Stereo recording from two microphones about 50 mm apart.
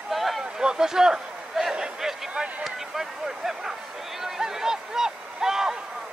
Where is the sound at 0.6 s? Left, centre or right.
Centre.